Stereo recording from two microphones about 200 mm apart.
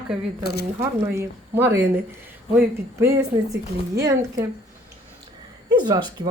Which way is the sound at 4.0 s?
15° right (ahead or behind).